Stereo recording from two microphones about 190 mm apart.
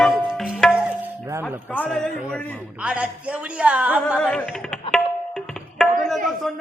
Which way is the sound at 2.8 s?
5° right (ahead or behind).